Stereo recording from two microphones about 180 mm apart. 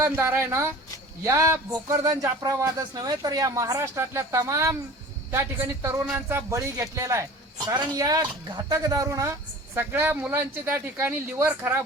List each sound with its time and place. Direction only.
0.0 s speech: 15° right (ahead or behind)